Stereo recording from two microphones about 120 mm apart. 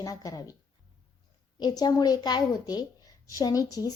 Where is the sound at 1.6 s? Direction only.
35° left (ahead or behind).